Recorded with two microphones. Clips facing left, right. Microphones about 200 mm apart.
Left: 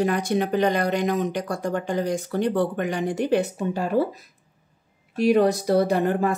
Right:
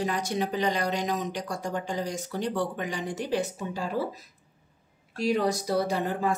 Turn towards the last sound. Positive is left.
turn(degrees=60)  # may be behind; listen again after turning